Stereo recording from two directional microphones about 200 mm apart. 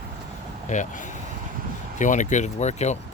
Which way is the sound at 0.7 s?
40° left (ahead or behind).